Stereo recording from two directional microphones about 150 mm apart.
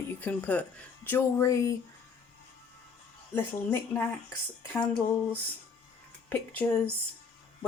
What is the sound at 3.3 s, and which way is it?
Speech, 15° left (ahead or behind).